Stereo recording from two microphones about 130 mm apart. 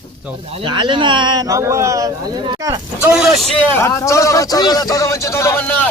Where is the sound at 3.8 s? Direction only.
25° left (ahead or behind).